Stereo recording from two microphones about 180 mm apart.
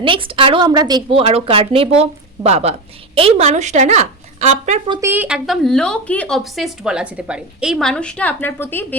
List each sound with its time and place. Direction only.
0.0 s a woman's voice: 30° right (ahead or behind)
4.9 s a woman's voice: 15° right (ahead or behind); by 9.0 s 10° left (ahead or behind)